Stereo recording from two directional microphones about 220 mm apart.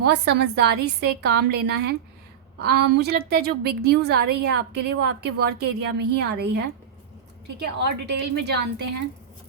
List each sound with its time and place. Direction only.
0.0 s a woman's voice: 50° right (ahead or behind)
8.1 s a woman's voice: 50° right (ahead or behind)